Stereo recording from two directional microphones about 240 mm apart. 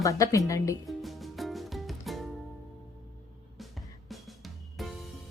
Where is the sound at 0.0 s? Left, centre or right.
Centre.